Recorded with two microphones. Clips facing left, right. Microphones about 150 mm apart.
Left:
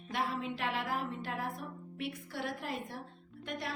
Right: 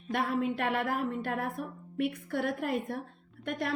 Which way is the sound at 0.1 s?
55° right (ahead or behind).